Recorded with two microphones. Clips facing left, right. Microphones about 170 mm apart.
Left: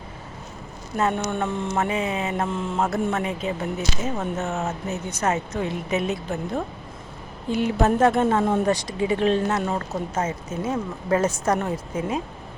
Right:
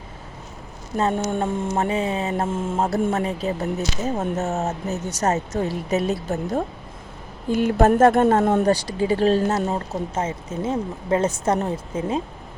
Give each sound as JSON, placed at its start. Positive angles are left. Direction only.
{"t": 1.1, "sound": "speech", "side_deg": -40}
{"t": 1.7, "sound": "speech", "side_deg": -35}
{"t": 8.7, "sound": "speech", "side_deg": -30}
{"t": 9.6, "sound": "speech", "side_deg": -25}